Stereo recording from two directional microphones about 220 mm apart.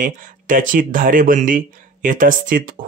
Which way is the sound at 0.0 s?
35° right (ahead or behind).